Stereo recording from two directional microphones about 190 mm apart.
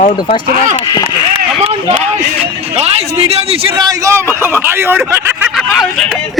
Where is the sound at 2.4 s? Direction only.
30° right (ahead or behind).